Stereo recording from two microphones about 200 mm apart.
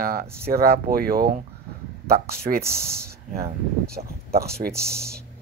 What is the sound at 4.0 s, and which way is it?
Speech, 40° right (ahead or behind).